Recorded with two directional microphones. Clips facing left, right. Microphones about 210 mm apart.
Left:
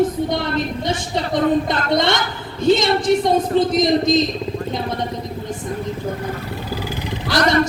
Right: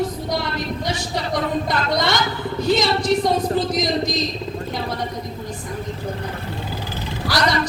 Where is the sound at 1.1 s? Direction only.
25° left (ahead or behind).